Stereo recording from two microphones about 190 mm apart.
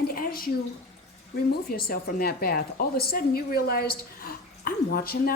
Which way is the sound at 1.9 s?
50° left (ahead or behind).